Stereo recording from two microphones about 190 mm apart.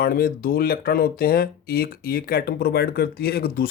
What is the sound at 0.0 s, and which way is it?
Speech, 50° left (ahead or behind).